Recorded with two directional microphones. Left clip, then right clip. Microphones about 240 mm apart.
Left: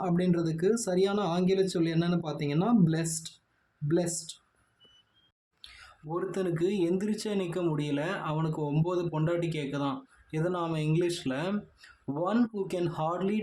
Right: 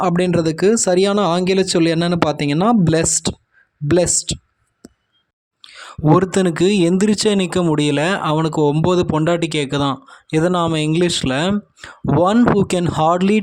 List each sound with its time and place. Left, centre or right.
0.0 s speech: right
5.6 s a sound: right
6.1 s speech: right